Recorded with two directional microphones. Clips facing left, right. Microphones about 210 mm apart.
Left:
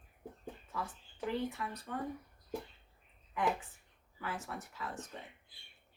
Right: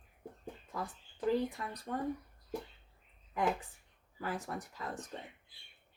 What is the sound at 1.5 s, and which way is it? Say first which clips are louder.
Speech: right 1 dB; 35° right (ahead or behind).